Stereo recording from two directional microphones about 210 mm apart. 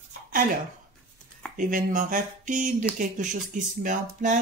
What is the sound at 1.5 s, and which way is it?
A woman's voice, 40° right (ahead or behind).